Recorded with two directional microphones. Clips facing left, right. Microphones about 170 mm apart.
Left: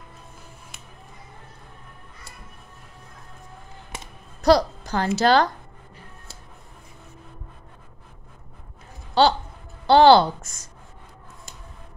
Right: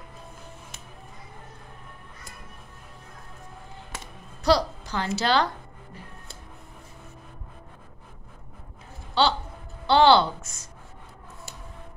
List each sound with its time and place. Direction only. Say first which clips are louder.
3.9 s music: left 2 dB; 15° left (ahead or behind)
4.4 s speech: left 4 dB; 45° left (ahead or behind)
9.2 s a woman's voice: left 5 dB; 40° left (ahead or behind)